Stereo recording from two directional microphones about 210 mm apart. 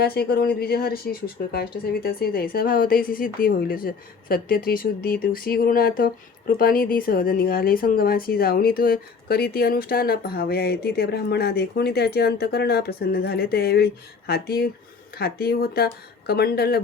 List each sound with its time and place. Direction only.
0.0 s speech: 50° left (ahead or behind)